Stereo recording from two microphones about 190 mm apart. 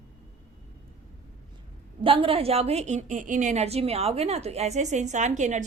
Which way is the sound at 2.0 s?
30° right (ahead or behind).